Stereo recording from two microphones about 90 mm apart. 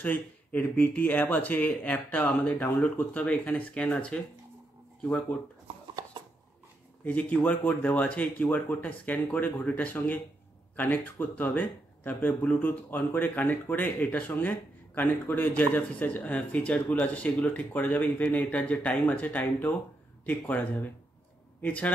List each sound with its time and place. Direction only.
0.0 s speech: 20° left (ahead or behind)
6.2 s a sound: 60° right (ahead or behind)
7.1 s speech: 15° left (ahead or behind)